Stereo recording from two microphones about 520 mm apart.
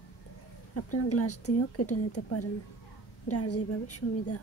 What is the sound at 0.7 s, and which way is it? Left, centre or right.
Speech, left.